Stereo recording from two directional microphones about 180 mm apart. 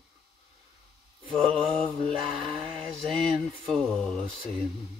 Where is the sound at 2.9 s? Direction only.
Centre (ahead or behind).